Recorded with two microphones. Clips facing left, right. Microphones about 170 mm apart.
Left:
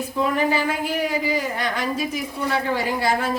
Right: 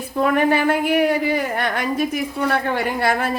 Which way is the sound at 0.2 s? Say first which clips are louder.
Right 4 dB; 60° right (ahead or behind).